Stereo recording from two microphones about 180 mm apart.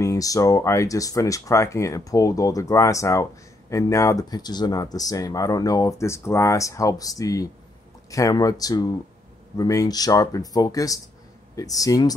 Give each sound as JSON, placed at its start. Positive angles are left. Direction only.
{"t": 0.0, "sound": "speech", "side_deg": 20}